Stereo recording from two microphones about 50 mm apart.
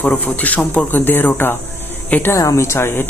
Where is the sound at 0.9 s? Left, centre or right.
Left.